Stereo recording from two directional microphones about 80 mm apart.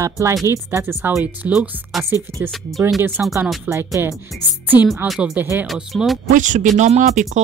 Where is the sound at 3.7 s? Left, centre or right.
Right.